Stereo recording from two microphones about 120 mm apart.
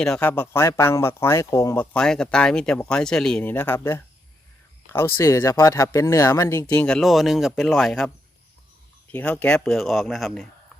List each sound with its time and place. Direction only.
0.0 s speech: 5° left (ahead or behind)
0.3 s speech: 20° left (ahead or behind); by 3.4 s 5° left (ahead or behind)
3.4 s speech: 15° left (ahead or behind)
6.8 s speech: 5° left (ahead or behind)
9.1 s speech: 10° left (ahead or behind)